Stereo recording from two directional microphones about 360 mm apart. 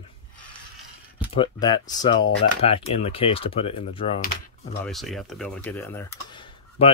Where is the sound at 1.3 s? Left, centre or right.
Centre.